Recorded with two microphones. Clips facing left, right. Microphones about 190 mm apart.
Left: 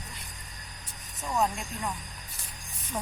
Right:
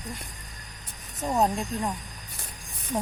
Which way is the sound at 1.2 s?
35° right (ahead or behind).